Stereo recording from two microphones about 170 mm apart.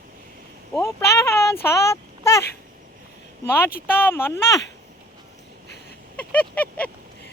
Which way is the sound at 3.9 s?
15° left (ahead or behind).